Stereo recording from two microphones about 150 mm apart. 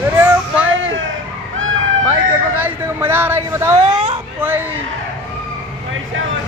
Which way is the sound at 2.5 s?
15° right (ahead or behind).